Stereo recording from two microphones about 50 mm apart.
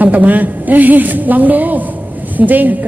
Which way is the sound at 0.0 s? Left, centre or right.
Right.